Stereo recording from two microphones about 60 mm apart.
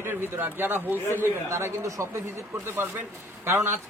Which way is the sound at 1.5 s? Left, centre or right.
Right.